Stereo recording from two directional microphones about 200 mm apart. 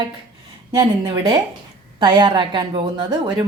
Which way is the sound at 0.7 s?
20° right (ahead or behind).